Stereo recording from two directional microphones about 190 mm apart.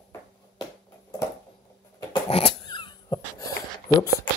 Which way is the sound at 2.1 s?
30° left (ahead or behind).